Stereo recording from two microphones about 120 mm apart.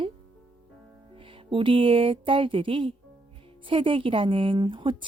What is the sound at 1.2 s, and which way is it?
Speech, 45° right (ahead or behind).